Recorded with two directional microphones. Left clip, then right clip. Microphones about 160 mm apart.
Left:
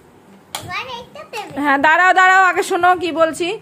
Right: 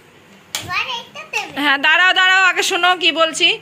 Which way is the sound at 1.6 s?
20° left (ahead or behind).